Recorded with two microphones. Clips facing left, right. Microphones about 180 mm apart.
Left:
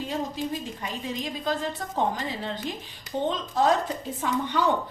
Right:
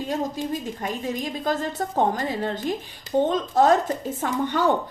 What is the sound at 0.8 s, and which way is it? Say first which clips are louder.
A woman's voice: right 5 dB; 45° right (ahead or behind).